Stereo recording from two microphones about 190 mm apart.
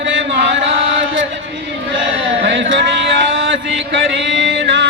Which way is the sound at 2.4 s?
75° right (ahead or behind).